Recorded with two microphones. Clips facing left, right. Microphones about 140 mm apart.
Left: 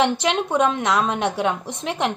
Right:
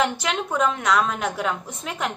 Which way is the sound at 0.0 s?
25° left (ahead or behind).